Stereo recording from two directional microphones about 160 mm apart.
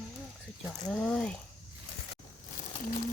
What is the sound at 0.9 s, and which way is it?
Speech, 5° left (ahead or behind).